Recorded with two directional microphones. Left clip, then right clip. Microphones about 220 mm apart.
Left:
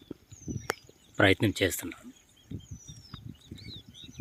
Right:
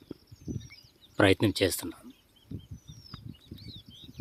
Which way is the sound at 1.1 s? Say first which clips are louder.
Even; 5° right (ahead or behind).